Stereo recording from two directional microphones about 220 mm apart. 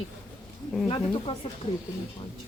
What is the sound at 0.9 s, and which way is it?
Speech, 25° left (ahead or behind).